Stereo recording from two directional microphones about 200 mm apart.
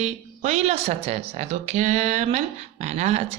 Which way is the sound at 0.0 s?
30° right (ahead or behind).